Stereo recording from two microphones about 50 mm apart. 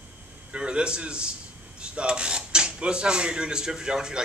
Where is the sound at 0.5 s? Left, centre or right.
Centre.